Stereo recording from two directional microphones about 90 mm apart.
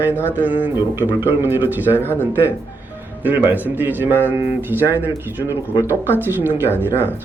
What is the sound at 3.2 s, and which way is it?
Speech, 20° right (ahead or behind).